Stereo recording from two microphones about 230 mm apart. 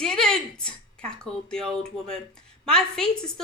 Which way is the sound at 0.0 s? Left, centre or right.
Centre.